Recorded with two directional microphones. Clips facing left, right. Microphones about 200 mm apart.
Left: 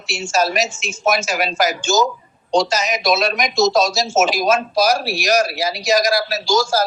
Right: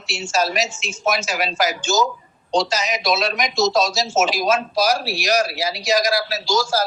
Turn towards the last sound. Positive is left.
turn(degrees=45)  # may be behind; listen again after turning